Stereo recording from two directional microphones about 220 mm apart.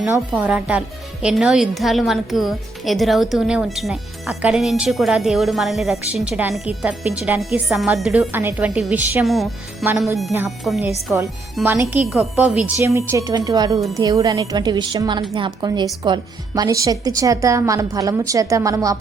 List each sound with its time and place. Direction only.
0.0 s a woman's voice: 5° right (ahead or behind)